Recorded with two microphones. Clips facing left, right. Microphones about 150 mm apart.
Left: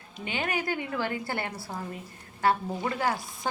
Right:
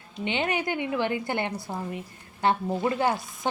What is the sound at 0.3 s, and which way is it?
A woman's voice, 20° right (ahead or behind).